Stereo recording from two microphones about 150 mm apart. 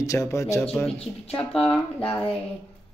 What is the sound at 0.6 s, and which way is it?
A woman's voice, 5° left (ahead or behind).